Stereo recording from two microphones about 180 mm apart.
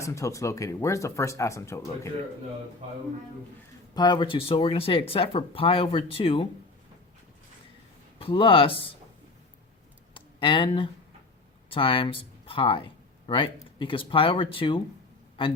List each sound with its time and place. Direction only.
0.0 s speech: 15° left (ahead or behind)
3.9 s speech: 25° left (ahead or behind)
8.2 s speech: 30° left (ahead or behind)
10.2 s a sound: 30° left (ahead or behind)
11.7 s speech: 30° left (ahead or behind)